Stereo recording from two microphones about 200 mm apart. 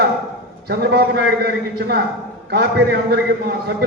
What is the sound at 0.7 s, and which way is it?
A man's voice, 55° right (ahead or behind).